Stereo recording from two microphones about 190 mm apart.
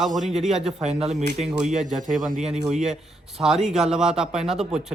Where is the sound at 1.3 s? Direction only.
5° right (ahead or behind).